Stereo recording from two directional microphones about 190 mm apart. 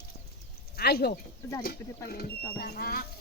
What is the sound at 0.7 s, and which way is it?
Speech, 55° left (ahead or behind).